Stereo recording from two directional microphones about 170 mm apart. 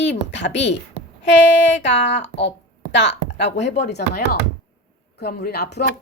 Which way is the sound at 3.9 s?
65° left (ahead or behind).